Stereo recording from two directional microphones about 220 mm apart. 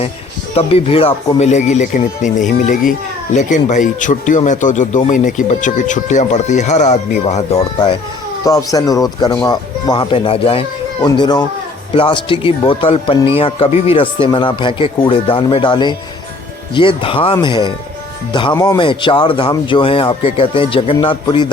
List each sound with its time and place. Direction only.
0.5 s speech: 25° left (ahead or behind)
8.4 s speech: 15° left (ahead or behind)